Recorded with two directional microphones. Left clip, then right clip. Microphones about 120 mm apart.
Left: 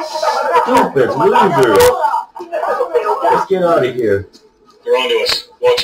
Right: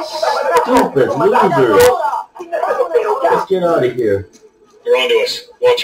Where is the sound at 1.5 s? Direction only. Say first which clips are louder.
Even; 20° right (ahead or behind).